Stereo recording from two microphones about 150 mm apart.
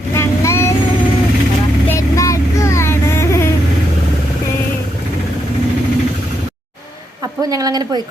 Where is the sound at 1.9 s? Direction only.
20° left (ahead or behind).